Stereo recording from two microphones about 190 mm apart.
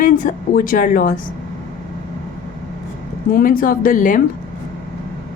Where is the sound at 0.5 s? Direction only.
45° left (ahead or behind).